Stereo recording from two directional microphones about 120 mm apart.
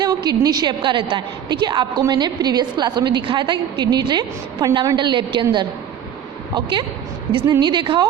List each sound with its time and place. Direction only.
0.0 s a woman's voice: 35° right (ahead or behind)